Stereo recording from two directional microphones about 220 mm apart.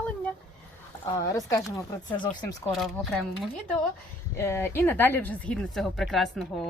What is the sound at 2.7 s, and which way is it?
Speech, centre (ahead or behind).